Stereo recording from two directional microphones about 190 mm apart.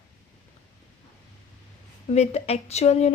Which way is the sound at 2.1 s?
35° left (ahead or behind).